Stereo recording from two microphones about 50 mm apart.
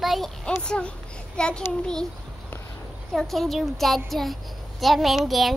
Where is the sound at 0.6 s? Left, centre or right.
Centre.